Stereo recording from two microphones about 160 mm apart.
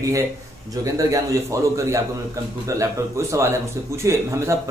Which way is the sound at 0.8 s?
20° right (ahead or behind).